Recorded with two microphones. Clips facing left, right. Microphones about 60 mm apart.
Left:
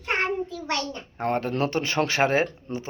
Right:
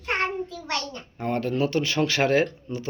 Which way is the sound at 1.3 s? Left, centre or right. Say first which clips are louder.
Right 1 dB; left.